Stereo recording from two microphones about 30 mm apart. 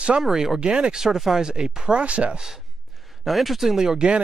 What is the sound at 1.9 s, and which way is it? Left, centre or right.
Speech, right.